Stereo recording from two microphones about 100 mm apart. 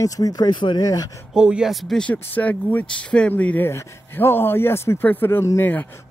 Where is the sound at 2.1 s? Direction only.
15° left (ahead or behind).